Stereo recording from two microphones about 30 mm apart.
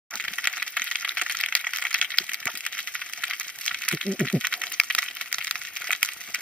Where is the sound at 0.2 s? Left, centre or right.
Left.